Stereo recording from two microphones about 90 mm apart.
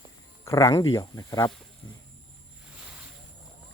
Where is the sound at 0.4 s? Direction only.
40° left (ahead or behind).